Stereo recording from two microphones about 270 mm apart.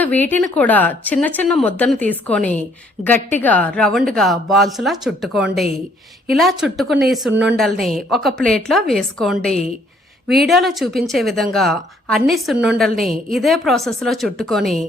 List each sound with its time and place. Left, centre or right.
0.0 s a woman's voice: centre
13.0 s a woman's voice: right
13.3 s speech: centre